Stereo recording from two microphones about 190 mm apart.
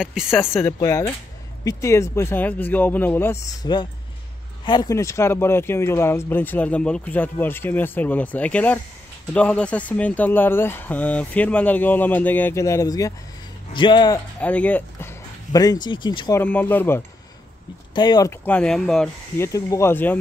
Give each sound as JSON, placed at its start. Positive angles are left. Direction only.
{"t": 0.0, "sound": "speech", "side_deg": -5}
{"t": 0.6, "sound": "speech", "side_deg": 15}
{"t": 14.4, "sound": "speech", "side_deg": 10}
{"t": 16.4, "sound": "speech", "side_deg": 10}
{"t": 17.9, "sound": "speech", "side_deg": 20}
{"t": 18.4, "sound": "speech", "side_deg": 5}